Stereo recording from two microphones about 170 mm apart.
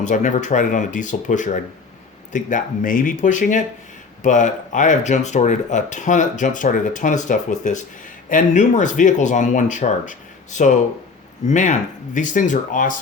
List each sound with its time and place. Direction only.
0.0 s speech: 45° left (ahead or behind)